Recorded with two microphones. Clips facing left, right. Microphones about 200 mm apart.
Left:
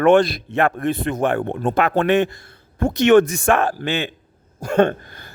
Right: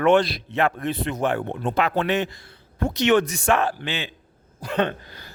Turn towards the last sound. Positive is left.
turn(degrees=50)  # may be behind; listen again after turning